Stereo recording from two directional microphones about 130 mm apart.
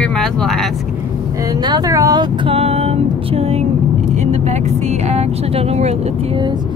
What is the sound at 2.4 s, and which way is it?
Female singing, 50° right (ahead or behind).